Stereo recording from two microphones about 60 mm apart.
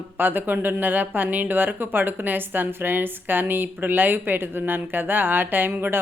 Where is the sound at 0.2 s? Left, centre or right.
Right.